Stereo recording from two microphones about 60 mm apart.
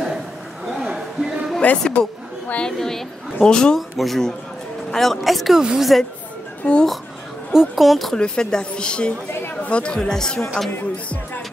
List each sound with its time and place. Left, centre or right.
0.7 s a sound: centre
1.6 s a woman's voice: left
2.6 s speech: centre
3.9 s speech: centre
6.6 s a child's voice: centre
7.5 s speech: centre
8.2 s speech: centre
9.9 s speech: centre